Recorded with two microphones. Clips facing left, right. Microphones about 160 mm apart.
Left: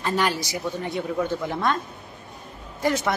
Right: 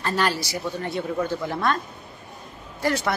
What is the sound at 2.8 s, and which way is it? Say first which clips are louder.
Speech: left 1 dB; 20° left (ahead or behind).